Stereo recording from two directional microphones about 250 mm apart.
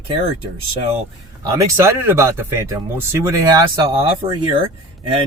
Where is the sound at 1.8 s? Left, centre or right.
Centre.